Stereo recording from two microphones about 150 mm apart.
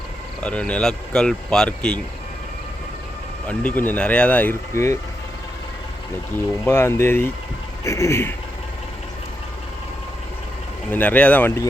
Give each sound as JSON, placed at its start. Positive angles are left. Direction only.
{"t": 0.4, "sound": "speech", "side_deg": 5}
{"t": 3.4, "sound": "speech", "side_deg": 10}
{"t": 6.7, "sound": "speech", "side_deg": 15}
{"t": 10.9, "sound": "speech", "side_deg": 10}